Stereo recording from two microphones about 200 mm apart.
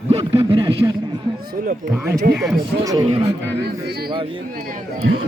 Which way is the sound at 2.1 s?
50° right (ahead or behind).